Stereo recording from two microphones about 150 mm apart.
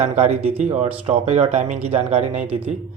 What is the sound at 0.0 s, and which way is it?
Speech, 45° right (ahead or behind).